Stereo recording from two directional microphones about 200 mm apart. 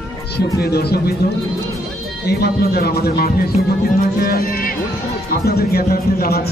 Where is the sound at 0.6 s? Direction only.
50° left (ahead or behind).